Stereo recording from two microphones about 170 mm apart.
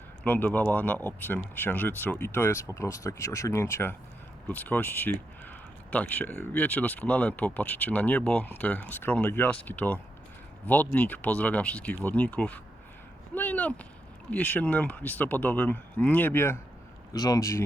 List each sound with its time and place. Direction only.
0.3 s speech: 10° left (ahead or behind)
13.3 s a sound: 10° left (ahead or behind)
14.3 s speech: 10° left (ahead or behind)